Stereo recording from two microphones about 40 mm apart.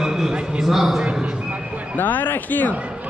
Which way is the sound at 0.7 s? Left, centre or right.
Centre.